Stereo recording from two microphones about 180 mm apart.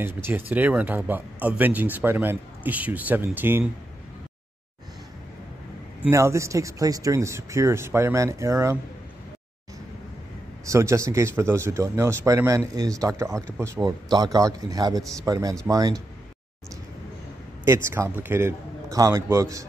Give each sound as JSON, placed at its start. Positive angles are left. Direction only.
{"t": 0.0, "sound": "a man's voice", "side_deg": -10}
{"t": 6.0, "sound": "a man's voice", "side_deg": -15}
{"t": 10.6, "sound": "a man's voice", "side_deg": -15}
{"t": 17.8, "sound": "a man's voice", "side_deg": -15}